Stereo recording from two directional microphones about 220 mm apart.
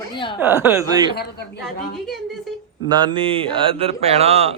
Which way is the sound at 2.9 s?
20° right (ahead or behind).